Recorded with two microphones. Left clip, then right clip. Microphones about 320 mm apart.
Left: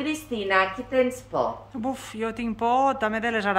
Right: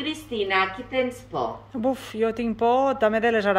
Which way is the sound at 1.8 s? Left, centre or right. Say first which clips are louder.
Right 8 dB; centre.